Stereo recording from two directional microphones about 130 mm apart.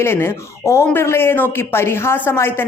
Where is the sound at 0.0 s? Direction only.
20° left (ahead or behind).